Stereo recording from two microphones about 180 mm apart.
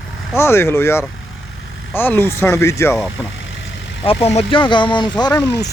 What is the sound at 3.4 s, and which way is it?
Vehicle, 90° left.